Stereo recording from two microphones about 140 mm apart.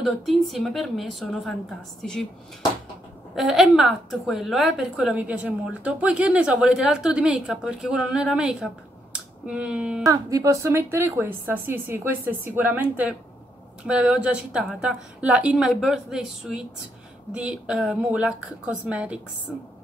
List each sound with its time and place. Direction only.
0.0 s a woman's voice: centre (ahead or behind)
3.3 s a woman's voice: centre (ahead or behind)
10.0 s a woman's voice: 25° right (ahead or behind); by 19.1 s 10° right (ahead or behind)